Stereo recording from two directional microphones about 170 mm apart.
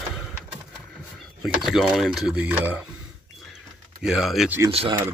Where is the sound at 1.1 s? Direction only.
Centre (ahead or behind).